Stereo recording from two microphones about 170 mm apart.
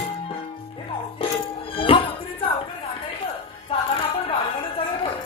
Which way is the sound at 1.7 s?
30° left (ahead or behind).